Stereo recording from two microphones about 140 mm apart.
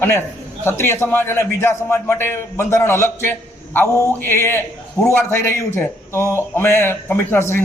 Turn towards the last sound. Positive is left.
turn(degrees=15)  # may be behind; listen again after turning